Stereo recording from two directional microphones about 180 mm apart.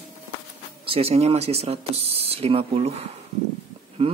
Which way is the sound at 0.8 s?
30° right (ahead or behind).